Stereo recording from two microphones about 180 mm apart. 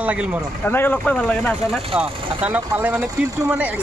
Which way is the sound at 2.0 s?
10° right (ahead or behind).